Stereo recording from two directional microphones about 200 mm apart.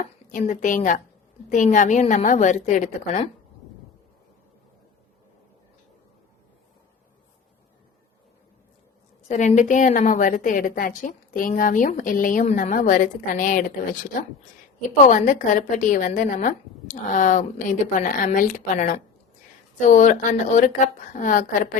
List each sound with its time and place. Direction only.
0.0 s a woman's voice: 40° left (ahead or behind)
9.3 s a woman's voice: 35° left (ahead or behind)
14.8 s a woman's voice: 40° left (ahead or behind)